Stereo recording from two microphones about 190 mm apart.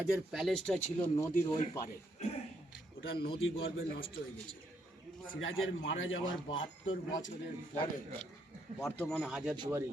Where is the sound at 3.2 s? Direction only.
55° left (ahead or behind).